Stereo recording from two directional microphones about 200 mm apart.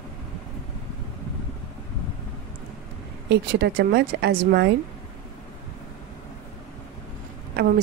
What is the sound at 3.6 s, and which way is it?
Speech, 55° right (ahead or behind).